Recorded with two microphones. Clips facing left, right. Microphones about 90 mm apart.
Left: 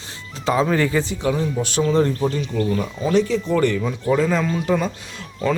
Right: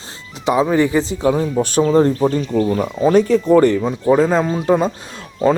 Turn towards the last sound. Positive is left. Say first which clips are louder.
# right 5 dB
turn(degrees=-30)  # may be behind; listen again after turning